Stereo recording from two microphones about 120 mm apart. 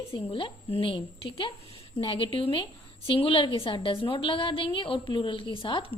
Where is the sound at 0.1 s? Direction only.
50° left (ahead or behind).